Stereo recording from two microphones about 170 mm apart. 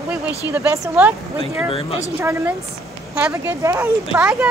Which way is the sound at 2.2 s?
10° right (ahead or behind).